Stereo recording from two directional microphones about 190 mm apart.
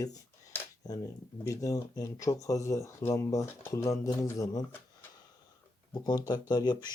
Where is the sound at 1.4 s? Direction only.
15° left (ahead or behind).